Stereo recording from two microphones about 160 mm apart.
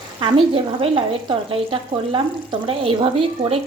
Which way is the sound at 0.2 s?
35° right (ahead or behind).